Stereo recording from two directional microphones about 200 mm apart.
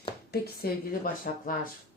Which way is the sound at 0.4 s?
50° left (ahead or behind).